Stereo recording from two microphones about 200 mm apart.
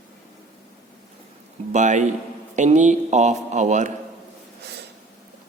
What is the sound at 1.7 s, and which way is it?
Speech, 35° right (ahead or behind).